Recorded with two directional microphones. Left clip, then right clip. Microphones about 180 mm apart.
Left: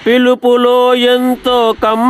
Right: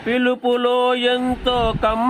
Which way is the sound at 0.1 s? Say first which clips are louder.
Left 9 dB; 50° left (ahead or behind).